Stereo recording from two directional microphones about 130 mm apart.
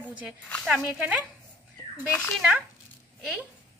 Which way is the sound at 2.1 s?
5° left (ahead or behind).